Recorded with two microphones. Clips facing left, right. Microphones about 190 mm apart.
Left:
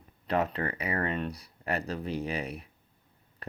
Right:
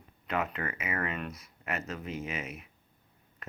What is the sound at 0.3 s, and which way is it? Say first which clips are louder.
Speech: left 4 dB; 35° left (ahead or behind).